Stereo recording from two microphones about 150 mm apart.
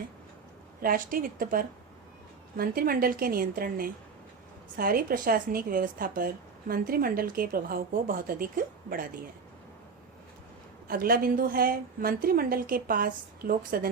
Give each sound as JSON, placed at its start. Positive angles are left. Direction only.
{"t": 0.8, "sound": "a woman's voice", "side_deg": -70}
{"t": 10.8, "sound": "a woman's voice", "side_deg": -75}